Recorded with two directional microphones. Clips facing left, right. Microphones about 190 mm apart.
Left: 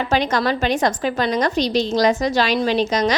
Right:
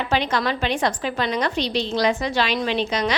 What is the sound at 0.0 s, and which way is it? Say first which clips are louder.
A woman's voice: left 3 dB; 45° left (ahead or behind).